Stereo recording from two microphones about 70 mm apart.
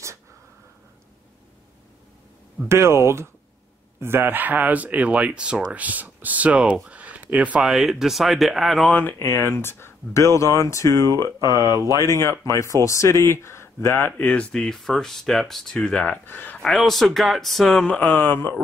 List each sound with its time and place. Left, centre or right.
2.7 s speech: right
7.6 s speech: centre
9.2 s speech: left
11.3 s speech: right
11.9 s speech: left
14.0 s speech: left
16.6 s speech: centre
17.8 s speech: centre